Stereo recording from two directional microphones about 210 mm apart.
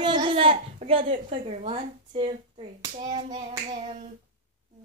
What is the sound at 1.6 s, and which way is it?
A woman's voice, 25° right (ahead or behind).